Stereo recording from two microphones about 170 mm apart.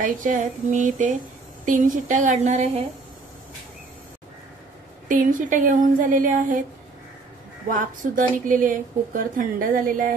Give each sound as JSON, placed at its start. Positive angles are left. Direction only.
{"t": 0.0, "sound": "a woman's voice", "side_deg": -50}
{"t": 5.0, "sound": "a woman's voice", "side_deg": -50}
{"t": 8.0, "sound": "a woman's voice", "side_deg": -50}